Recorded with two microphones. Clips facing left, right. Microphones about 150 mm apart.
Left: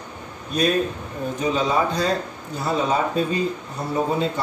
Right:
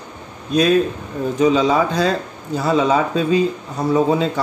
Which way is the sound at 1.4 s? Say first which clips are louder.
Right 6 dB; 90° right.